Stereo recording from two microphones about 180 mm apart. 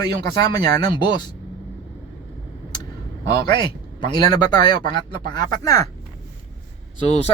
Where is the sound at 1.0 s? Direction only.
25° left (ahead or behind).